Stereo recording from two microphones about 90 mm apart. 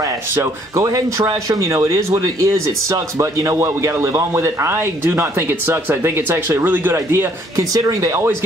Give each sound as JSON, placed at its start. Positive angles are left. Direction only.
{"t": 0.4, "sound": "speech", "side_deg": -35}
{"t": 7.7, "sound": "speech", "side_deg": -40}